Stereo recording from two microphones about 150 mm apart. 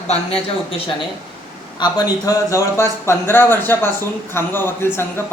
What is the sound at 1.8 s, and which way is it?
Speech, 25° left (ahead or behind).